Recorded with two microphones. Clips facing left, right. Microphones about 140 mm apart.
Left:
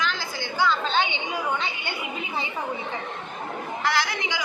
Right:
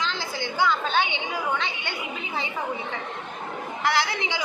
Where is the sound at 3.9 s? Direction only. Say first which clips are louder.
Right 2 dB; 20° right (ahead or behind).